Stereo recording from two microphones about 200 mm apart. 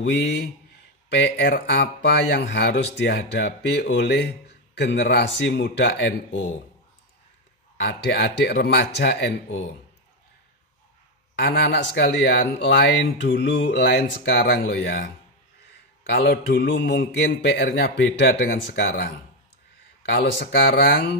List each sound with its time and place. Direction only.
0.0 s speech: 60° left (ahead or behind)
7.7 s speech: 60° left (ahead or behind)
11.3 s speech: 55° left (ahead or behind)
16.1 s speech: 50° left (ahead or behind)